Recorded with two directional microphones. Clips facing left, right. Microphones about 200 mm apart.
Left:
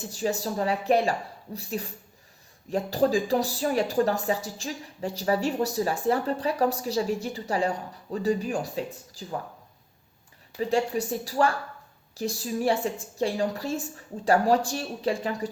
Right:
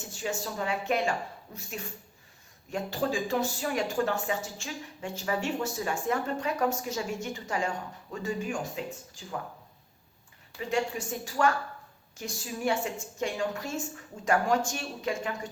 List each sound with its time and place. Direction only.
0.0 s speech: 35° left (ahead or behind)
10.7 s speech: 35° left (ahead or behind)